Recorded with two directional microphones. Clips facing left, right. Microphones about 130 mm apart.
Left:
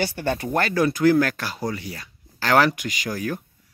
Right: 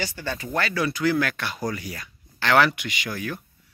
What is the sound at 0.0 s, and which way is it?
Speech, 55° left (ahead or behind).